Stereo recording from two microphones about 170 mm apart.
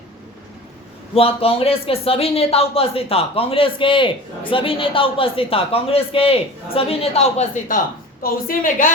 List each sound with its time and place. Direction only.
1.1 s speech: 35° left (ahead or behind)
8.2 s a woman's voice: 55° left (ahead or behind)